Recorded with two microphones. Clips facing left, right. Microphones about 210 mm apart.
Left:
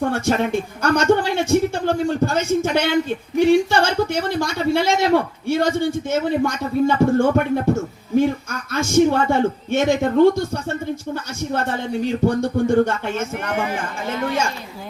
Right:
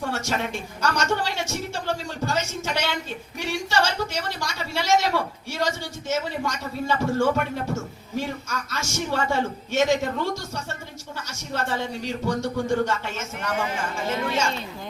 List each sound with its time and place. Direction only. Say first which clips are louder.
0.0 s a man's voice: left 8 dB; 55° left (ahead or behind)